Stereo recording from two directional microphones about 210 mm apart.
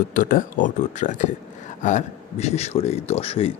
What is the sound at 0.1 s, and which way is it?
A man's voice, 40° left (ahead or behind).